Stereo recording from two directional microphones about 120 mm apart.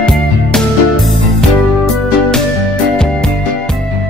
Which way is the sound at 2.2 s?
5° left (ahead or behind).